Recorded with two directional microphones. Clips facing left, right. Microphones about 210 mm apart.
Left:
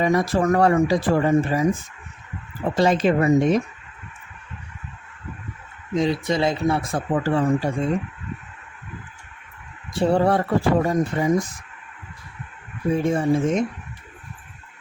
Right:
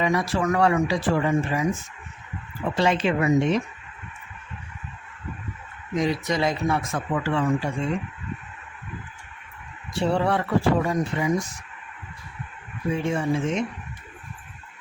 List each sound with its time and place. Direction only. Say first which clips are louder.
0.0 s speech: left 4 dB; 45° left (ahead or behind)
2.6 s speech: left 4 dB; 40° left (ahead or behind)
5.9 s speech: left 3 dB; 30° left (ahead or behind)
10.0 s speech: left 4 dB; 40° left (ahead or behind)
12.9 s speech: left 5 dB; 40° left (ahead or behind)